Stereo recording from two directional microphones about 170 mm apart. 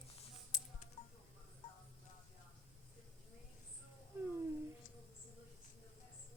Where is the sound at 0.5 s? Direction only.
50° left (ahead or behind).